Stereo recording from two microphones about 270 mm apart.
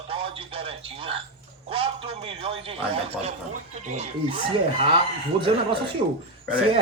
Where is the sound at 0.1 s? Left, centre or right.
Centre.